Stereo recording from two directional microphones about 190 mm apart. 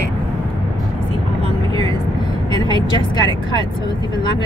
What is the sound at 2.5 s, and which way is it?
Speech, 25° left (ahead or behind).